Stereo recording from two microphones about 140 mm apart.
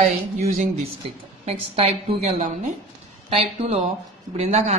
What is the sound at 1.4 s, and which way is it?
Speech, 45° right (ahead or behind).